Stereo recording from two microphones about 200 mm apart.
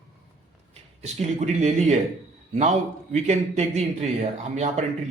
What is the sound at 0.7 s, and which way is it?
Speech, 35° right (ahead or behind).